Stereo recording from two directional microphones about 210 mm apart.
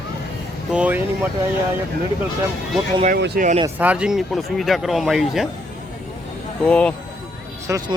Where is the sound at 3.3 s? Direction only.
35° right (ahead or behind).